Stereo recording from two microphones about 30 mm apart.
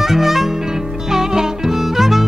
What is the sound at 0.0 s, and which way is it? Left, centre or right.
Music, centre.